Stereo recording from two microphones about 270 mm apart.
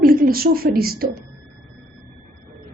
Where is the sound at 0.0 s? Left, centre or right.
Right.